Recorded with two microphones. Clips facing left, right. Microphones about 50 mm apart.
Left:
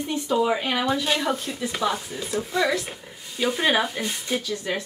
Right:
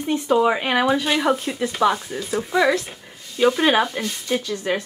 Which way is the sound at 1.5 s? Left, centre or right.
Right.